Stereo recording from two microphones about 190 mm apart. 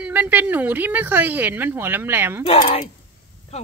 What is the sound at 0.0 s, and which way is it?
Speech, 10° right (ahead or behind).